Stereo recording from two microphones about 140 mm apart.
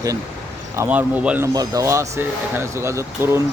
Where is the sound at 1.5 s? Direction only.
25° right (ahead or behind).